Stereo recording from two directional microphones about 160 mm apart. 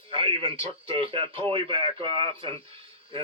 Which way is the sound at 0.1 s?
35° right (ahead or behind).